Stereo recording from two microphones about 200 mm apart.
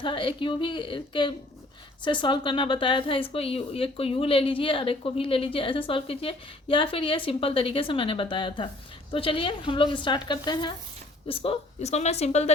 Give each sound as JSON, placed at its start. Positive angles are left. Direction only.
{"t": 0.0, "sound": "speech", "side_deg": 25}